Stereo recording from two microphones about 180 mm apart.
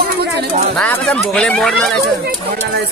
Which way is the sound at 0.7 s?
5° left (ahead or behind).